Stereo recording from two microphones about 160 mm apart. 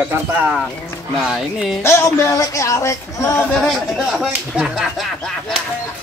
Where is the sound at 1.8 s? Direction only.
15° left (ahead or behind).